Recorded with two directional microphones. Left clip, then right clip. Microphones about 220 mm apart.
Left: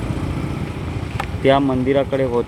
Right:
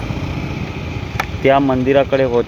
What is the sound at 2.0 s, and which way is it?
Speech, 15° right (ahead or behind).